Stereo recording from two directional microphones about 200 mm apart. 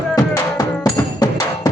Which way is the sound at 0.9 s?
20° left (ahead or behind).